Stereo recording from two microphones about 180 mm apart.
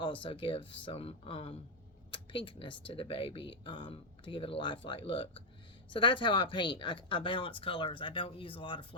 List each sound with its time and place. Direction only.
0.0 s speech: 30° left (ahead or behind)